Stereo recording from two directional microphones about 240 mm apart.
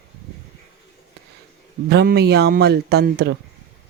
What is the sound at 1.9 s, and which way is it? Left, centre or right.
Speech, right.